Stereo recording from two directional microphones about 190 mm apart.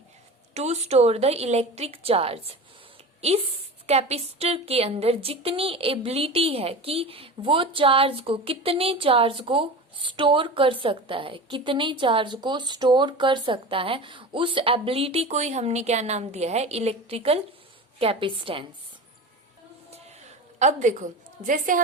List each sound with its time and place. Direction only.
0.5 s a woman's voice: 35° right (ahead or behind)
20.6 s a woman's voice: 40° right (ahead or behind)